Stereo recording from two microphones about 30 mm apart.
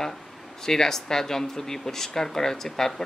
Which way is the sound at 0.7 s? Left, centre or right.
Centre.